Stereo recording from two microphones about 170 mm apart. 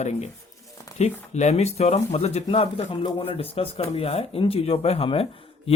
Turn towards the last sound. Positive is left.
turn(degrees=35)  # may be behind; listen again after turning